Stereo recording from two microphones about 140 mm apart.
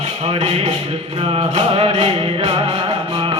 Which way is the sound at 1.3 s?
40° right (ahead or behind).